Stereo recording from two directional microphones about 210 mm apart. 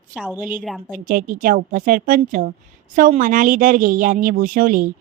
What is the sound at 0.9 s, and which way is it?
A woman's voice, 40° right (ahead or behind).